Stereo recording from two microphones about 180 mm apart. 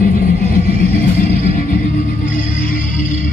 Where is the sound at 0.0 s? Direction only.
50° left (ahead or behind).